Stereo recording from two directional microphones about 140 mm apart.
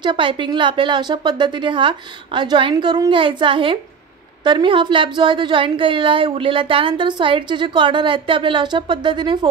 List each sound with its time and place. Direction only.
0.0 s a woman's voice: 35° right (ahead or behind)